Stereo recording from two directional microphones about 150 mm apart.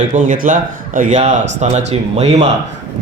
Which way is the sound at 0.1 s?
60° right (ahead or behind).